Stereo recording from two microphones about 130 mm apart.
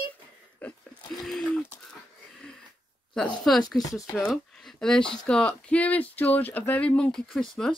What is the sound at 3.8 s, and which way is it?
Speech, 25° left (ahead or behind).